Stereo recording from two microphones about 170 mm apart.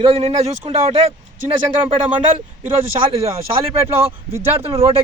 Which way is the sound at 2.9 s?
35° right (ahead or behind).